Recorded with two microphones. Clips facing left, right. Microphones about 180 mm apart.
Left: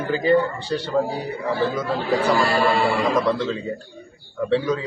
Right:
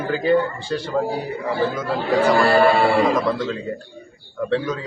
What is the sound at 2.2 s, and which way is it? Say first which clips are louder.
Speech: right 6 dB; 60° right (ahead or behind).